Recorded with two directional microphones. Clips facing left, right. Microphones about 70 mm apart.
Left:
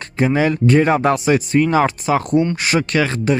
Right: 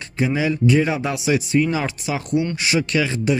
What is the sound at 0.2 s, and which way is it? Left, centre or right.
Speech, left.